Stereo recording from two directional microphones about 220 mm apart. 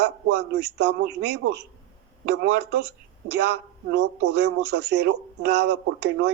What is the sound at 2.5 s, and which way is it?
Speech, 50° right (ahead or behind).